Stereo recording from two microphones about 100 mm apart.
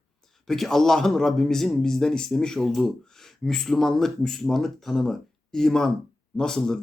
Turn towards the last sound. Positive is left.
turn(degrees=5)  # may be behind; listen again after turning